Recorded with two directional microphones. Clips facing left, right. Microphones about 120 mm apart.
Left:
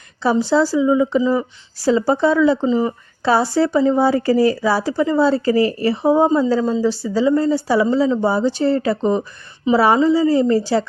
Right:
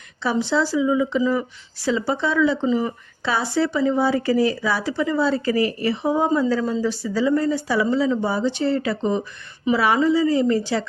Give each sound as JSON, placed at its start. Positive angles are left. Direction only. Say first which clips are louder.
{"t": 0.2, "sound": "speech", "louder": "left 5 dB", "side_deg": 40}